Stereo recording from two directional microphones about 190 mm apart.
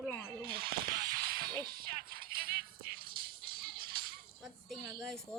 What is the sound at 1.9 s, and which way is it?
Music, 50° right (ahead or behind).